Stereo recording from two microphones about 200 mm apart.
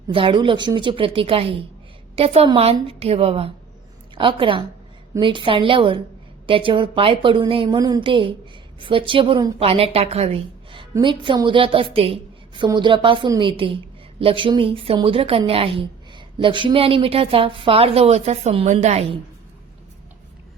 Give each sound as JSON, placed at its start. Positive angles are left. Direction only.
{"t": 0.1, "sound": "a woman's voice", "side_deg": -25}